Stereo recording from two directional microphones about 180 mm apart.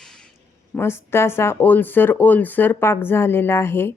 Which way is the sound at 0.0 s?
5° left (ahead or behind).